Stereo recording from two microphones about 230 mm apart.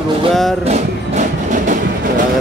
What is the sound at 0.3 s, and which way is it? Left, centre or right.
Speech, centre.